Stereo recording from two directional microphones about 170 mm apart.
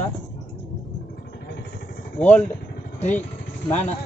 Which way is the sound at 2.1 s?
10° left (ahead or behind).